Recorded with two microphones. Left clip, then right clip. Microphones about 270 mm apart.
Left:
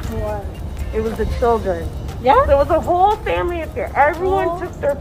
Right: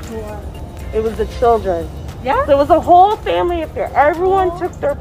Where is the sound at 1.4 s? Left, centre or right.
Right.